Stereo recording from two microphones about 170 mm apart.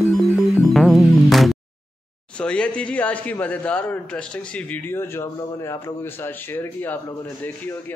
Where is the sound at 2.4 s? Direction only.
5° left (ahead or behind).